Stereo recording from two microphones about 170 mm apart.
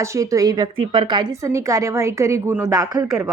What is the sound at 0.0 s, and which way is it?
Speech, 20° right (ahead or behind).